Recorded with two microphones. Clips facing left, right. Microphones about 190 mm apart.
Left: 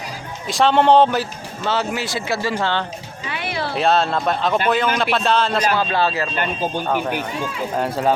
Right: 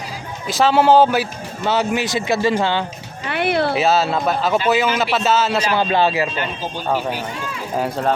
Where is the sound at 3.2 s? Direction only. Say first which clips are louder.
Right 7 dB; 60° right (ahead or behind).